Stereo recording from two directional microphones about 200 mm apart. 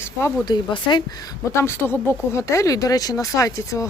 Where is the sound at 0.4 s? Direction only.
20° left (ahead or behind).